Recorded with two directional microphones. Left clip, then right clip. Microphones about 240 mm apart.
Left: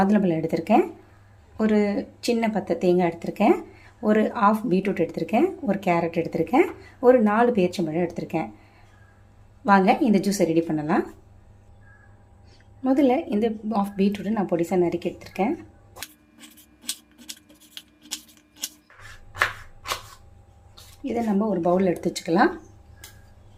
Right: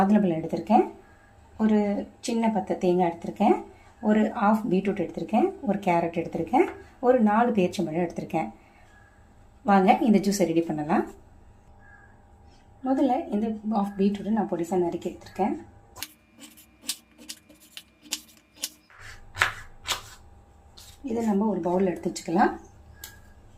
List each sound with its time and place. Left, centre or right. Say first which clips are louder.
0.0 s speech: left 2 dB; left
9.6 s speech: left 2 dB; left
12.8 s a woman's voice: left 4 dB; left
17.7 s a sound: even; centre
21.6 s a woman's voice: left 4 dB; left